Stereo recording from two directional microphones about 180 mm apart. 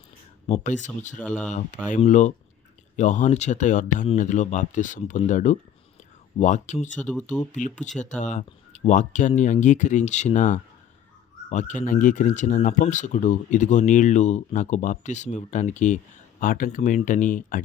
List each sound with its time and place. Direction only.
0.4 s speech: 40° left (ahead or behind)
1.1 s speech: 5° left (ahead or behind)
1.9 s speech: 40° left (ahead or behind)
7.0 s speech: 5° left (ahead or behind)
7.5 s speech: 45° left (ahead or behind)